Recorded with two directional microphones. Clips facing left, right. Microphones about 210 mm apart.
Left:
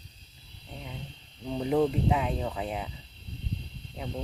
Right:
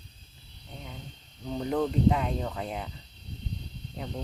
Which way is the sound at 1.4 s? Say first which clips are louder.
Left 3 dB; 5° left (ahead or behind).